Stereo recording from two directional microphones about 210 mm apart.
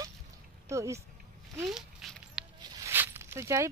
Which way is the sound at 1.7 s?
Centre (ahead or behind).